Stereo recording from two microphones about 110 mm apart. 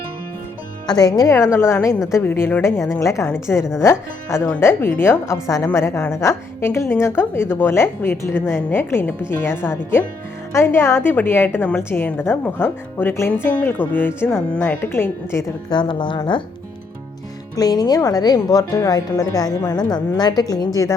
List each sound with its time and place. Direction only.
0.9 s a woman's voice: 35° left (ahead or behind)
15.7 s a woman's voice: 45° left (ahead or behind)
17.6 s a woman's voice: 35° left (ahead or behind)